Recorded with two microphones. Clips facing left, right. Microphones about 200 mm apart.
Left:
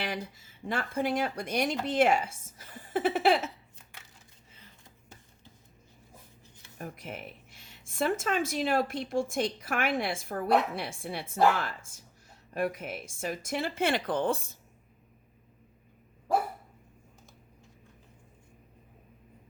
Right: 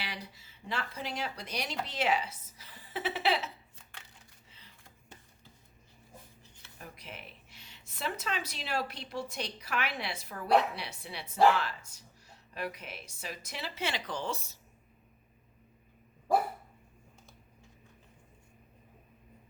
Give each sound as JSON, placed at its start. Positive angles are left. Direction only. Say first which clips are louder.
{"t": 0.0, "sound": "speech", "louder": "left 8 dB", "side_deg": 50}
{"t": 6.7, "sound": "speech", "louder": "left 7 dB", "side_deg": 50}